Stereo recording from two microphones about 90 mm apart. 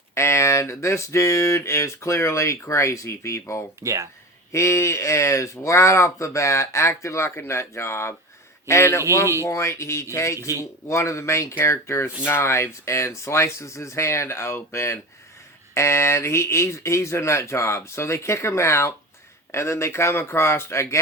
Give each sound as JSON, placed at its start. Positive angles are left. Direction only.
{"t": 0.1, "sound": "speech", "side_deg": 30}
{"t": 3.8, "sound": "speech", "side_deg": -35}
{"t": 4.5, "sound": "speech", "side_deg": 30}